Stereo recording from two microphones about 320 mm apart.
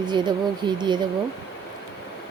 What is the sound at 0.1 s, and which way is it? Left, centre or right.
Speech, centre.